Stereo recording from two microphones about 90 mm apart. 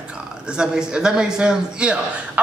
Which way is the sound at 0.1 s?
10° right (ahead or behind).